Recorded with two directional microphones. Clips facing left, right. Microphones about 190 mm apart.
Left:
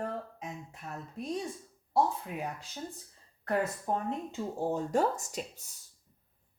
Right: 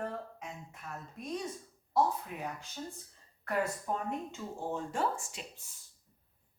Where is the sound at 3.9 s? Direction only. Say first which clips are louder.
Left 3 dB; 35° left (ahead or behind).